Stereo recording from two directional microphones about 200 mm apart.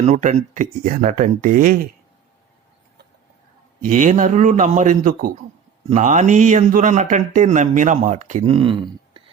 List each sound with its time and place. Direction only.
0.0 s speech: 35° right (ahead or behind)
3.8 s speech: 40° right (ahead or behind)